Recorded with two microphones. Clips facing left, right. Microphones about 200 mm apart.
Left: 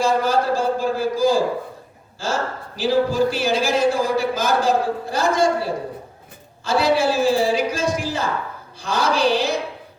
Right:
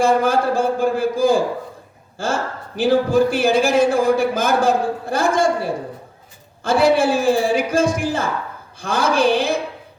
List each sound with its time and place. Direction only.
0.0 s a sound: 55° right (ahead or behind)
2.1 s a man's voice: 55° right (ahead or behind)
6.6 s a man's voice: 55° right (ahead or behind)